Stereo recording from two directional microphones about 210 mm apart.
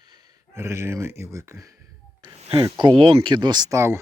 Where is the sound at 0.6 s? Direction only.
10° right (ahead or behind).